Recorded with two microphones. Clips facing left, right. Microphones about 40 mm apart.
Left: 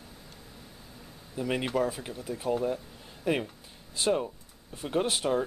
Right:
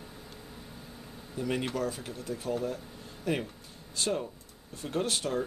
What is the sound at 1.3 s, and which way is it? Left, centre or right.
Speech, centre.